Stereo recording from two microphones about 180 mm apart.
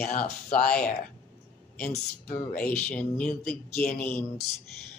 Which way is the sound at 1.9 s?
45° left (ahead or behind).